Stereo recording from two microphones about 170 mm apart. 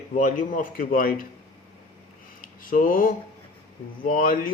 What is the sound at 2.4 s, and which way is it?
Speech, 55° left (ahead or behind).